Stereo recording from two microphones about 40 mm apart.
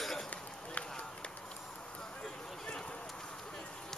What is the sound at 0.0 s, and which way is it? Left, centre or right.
Run, centre.